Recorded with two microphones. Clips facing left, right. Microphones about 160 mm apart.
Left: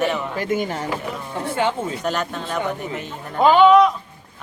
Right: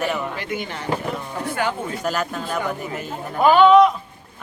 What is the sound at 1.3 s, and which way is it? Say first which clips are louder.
Speech: left 4 dB; 25° left (ahead or behind).